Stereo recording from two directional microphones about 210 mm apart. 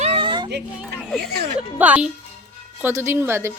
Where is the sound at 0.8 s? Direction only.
5° right (ahead or behind).